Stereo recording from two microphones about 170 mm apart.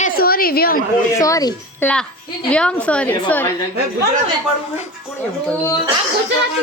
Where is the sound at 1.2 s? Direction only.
20° left (ahead or behind).